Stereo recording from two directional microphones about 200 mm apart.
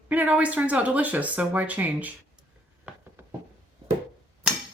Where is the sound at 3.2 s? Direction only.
10° right (ahead or behind).